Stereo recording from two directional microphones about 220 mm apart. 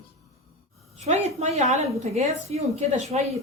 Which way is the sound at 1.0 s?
30° right (ahead or behind).